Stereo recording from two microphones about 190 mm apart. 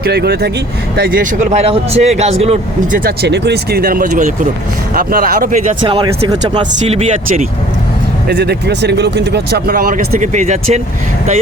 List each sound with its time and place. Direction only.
0.0 s speech: 60° right (ahead or behind); by 3.0 s 35° right (ahead or behind)
3.0 s speech: 55° right (ahead or behind)
5.9 s speech: 20° right (ahead or behind)
6.8 s speech: 35° right (ahead or behind)
8.3 s speech: 60° right (ahead or behind); by 10.8 s 35° right (ahead or behind)